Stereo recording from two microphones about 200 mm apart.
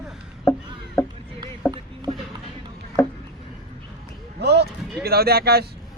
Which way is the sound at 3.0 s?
10° left (ahead or behind).